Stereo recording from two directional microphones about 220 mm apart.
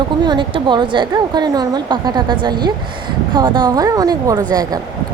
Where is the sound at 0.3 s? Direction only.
20° right (ahead or behind).